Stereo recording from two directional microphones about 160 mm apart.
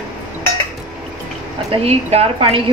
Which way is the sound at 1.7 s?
40° right (ahead or behind).